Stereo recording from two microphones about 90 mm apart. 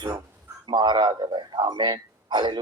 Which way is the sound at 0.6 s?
60° right (ahead or behind).